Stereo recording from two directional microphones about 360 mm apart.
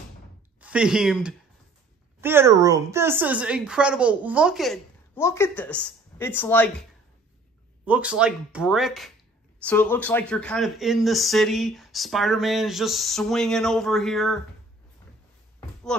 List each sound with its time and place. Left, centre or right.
0.6 s speech: centre
7.8 s speech: centre
15.9 s speech: centre